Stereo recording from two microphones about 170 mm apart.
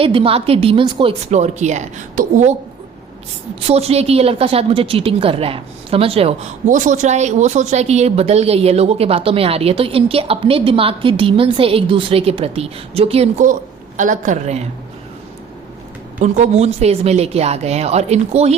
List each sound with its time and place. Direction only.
0.0 s a woman's voice: 30° right (ahead or behind)
1.3 s a woman's voice: 45° right (ahead or behind)
3.6 s a woman's voice: 35° right (ahead or behind)
13.5 s a woman's voice: 50° right (ahead or behind)
16.2 s a woman's voice: 45° right (ahead or behind)